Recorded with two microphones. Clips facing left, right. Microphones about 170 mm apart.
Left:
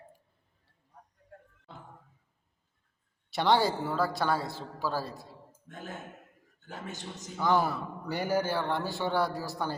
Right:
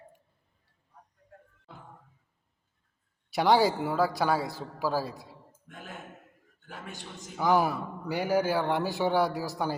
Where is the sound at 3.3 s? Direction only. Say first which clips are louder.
Right 3 dB; 10° right (ahead or behind).